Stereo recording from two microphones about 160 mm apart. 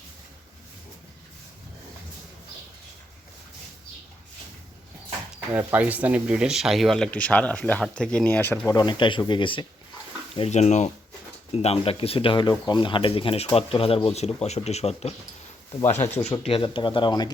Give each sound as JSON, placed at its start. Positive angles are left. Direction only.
{"t": 5.5, "sound": "speech", "side_deg": -10}
{"t": 8.7, "sound": "speech", "side_deg": 30}
{"t": 10.3, "sound": "speech", "side_deg": 40}